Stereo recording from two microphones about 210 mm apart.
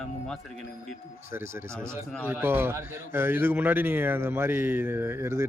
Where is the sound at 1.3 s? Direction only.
10° right (ahead or behind).